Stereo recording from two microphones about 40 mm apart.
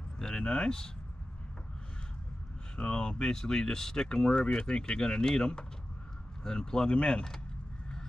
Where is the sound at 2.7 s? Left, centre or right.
Left.